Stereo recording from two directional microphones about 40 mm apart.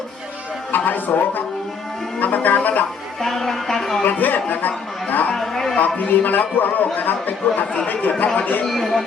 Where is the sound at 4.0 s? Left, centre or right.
Left.